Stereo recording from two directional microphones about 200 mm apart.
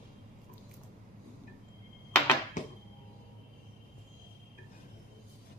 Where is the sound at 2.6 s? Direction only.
40° left (ahead or behind).